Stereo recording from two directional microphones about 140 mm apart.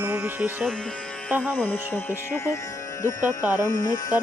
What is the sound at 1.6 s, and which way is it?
Speech, 15° left (ahead or behind).